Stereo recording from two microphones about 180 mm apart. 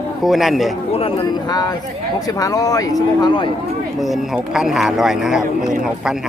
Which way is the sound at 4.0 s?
Centre (ahead or behind).